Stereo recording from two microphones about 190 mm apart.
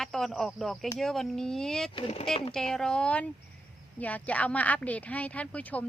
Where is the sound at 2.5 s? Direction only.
5° left (ahead or behind).